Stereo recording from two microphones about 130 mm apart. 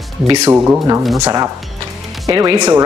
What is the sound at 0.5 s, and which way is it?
A woman's voice, 20° right (ahead or behind).